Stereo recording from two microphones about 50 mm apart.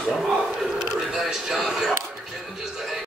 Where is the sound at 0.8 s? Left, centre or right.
Centre.